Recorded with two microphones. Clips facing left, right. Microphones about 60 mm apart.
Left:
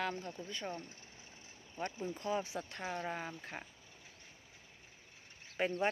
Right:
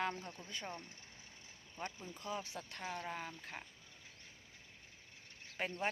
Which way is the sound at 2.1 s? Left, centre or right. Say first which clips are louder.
Left 6 dB; left.